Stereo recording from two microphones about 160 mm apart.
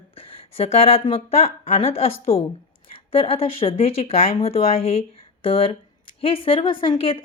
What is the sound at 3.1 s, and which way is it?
Speech, 35° left (ahead or behind).